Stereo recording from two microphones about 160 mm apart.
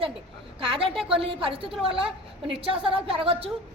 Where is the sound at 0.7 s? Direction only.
35° right (ahead or behind).